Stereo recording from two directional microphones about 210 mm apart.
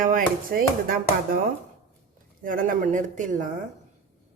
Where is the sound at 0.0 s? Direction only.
40° right (ahead or behind).